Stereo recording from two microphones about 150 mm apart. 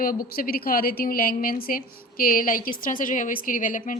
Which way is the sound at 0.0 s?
70° left (ahead or behind).